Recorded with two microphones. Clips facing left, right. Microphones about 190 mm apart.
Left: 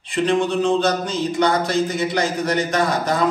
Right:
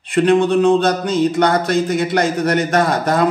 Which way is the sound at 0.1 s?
60° right (ahead or behind).